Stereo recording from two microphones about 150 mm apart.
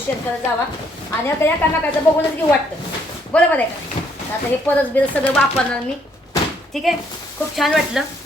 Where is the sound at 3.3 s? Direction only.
10° left (ahead or behind).